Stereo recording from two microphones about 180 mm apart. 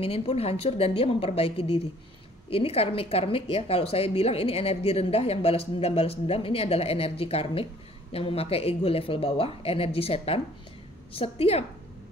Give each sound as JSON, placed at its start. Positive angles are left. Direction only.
{"t": 0.0, "sound": "a woman's voice", "side_deg": 35}